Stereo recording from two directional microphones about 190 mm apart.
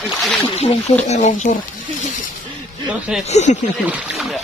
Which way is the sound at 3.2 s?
35° left (ahead or behind).